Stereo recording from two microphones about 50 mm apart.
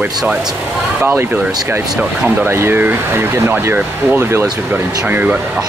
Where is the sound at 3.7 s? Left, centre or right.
Right.